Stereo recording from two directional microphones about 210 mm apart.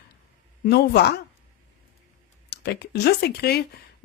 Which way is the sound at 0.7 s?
50° left (ahead or behind).